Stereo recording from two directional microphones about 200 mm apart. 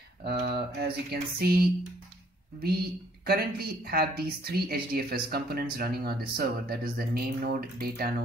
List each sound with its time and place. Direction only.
0.2 s a woman's voice: 55° right (ahead or behind)
2.6 s a woman's voice: 50° right (ahead or behind)